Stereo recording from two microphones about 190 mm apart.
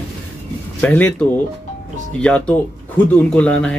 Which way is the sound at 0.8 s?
5° left (ahead or behind).